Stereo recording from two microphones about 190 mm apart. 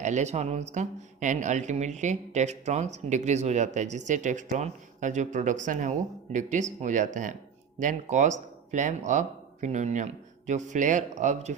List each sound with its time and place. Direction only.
0.0 s speech: 40° right (ahead or behind)